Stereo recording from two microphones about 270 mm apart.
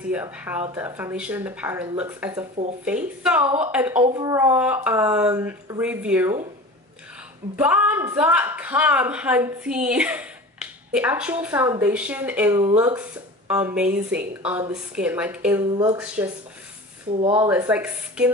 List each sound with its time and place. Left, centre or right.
0.1 s a woman's voice: centre
7.5 s a woman's voice: centre
17.5 s a woman's voice: centre